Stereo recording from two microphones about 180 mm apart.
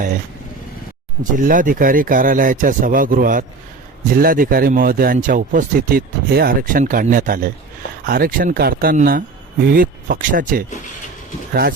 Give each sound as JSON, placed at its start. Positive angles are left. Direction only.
{"t": 1.2, "sound": "speech", "side_deg": -45}